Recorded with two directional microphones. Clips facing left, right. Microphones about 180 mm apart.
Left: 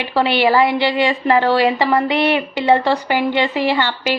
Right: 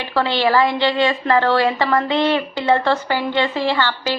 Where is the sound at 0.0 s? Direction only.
15° left (ahead or behind).